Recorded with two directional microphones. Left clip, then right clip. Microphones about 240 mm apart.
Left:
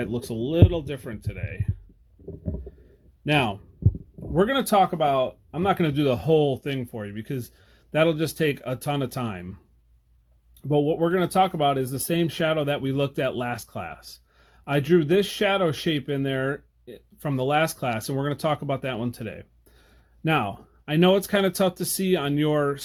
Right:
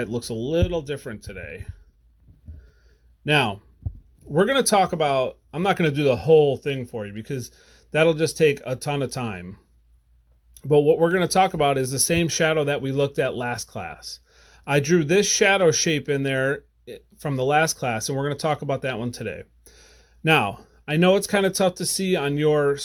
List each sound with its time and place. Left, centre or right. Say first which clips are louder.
0.0 s speech: right 1 dB; right
3.2 s speech: right 3 dB; right
10.6 s speech: right 5 dB; right